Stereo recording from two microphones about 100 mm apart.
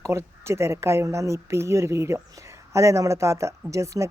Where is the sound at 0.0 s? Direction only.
30° right (ahead or behind).